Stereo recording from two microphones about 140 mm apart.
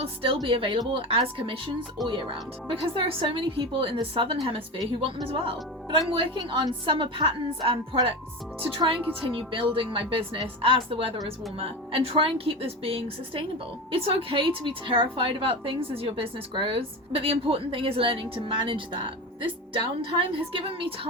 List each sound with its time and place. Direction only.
0.0 s a woman's voice: 40° right (ahead or behind)
9.2 s a woman's voice: 40° right (ahead or behind)